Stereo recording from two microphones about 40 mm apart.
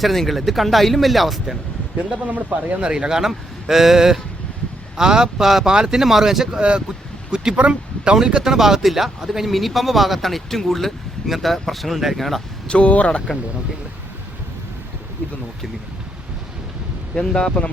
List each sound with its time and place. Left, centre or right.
0.0 s speech: centre
2.2 s speech: right
2.8 s speech: right
6.6 s speech: right; by 12.4 s centre
12.6 s speech: left
13.1 s speech: left
17.2 s speech: centre